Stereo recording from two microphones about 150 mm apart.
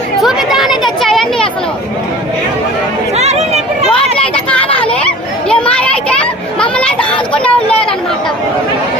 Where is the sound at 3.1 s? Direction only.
45° right (ahead or behind).